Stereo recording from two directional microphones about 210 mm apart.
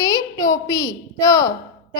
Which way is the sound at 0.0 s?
15° left (ahead or behind).